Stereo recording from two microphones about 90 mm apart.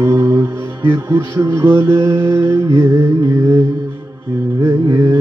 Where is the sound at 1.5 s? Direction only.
25° right (ahead or behind).